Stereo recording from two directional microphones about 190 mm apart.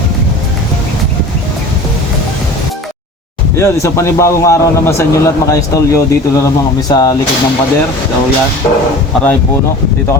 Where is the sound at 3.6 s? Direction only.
15° left (ahead or behind).